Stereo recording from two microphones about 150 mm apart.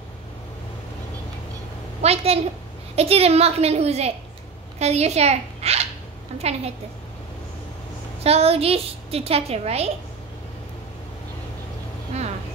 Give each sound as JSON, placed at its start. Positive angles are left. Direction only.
{"t": 2.0, "sound": "a woman's voice", "side_deg": -45}
{"t": 8.2, "sound": "a woman's voice", "side_deg": -40}